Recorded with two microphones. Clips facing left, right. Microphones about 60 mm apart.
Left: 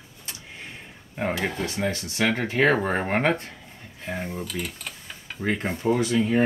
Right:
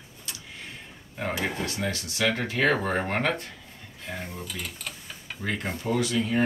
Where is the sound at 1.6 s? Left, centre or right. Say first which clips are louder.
Left 3 dB; left.